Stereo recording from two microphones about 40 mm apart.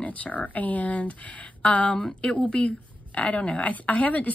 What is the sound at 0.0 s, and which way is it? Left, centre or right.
A woman's voice, left.